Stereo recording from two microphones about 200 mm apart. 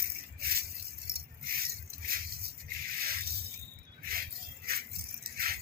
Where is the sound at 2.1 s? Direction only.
45° right (ahead or behind).